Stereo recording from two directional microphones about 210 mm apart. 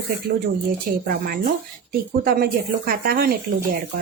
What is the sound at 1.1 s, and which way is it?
Speech, 45° right (ahead or behind).